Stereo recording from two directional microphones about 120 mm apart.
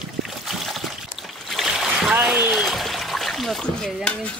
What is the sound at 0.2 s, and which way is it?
Trickle, centre (ahead or behind).